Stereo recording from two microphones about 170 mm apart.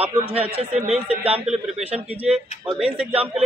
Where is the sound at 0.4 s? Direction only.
35° right (ahead or behind).